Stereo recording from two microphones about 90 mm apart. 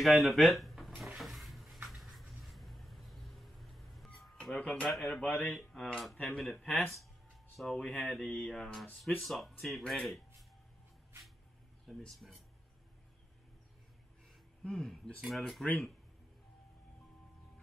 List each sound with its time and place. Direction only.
0.0 s speech: centre (ahead or behind)
1.1 s cupboard open or close: centre (ahead or behind)
1.9 s a sound: centre (ahead or behind)
4.2 s music: centre (ahead or behind)
4.6 s speech: 15° left (ahead or behind)
4.8 s speech: 5° left (ahead or behind)
12.0 s speech: 5° left (ahead or behind)
14.6 s speech: 10° left (ahead or behind)